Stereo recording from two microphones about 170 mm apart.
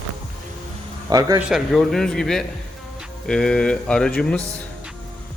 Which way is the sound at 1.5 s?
Centre (ahead or behind).